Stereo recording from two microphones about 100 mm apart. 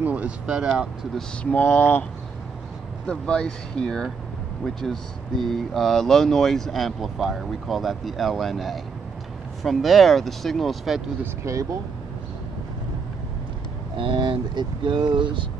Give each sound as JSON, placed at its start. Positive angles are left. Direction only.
{"t": 0.0, "sound": "speech", "side_deg": -15}
{"t": 1.1, "sound": "speech", "side_deg": 15}
{"t": 3.1, "sound": "speech", "side_deg": 10}
{"t": 11.4, "sound": "speech", "side_deg": -30}
{"t": 13.9, "sound": "speech", "side_deg": -55}